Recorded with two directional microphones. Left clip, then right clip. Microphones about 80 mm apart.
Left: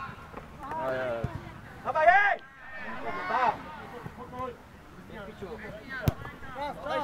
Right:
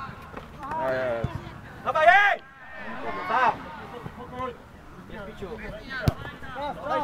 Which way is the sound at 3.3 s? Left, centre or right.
Right.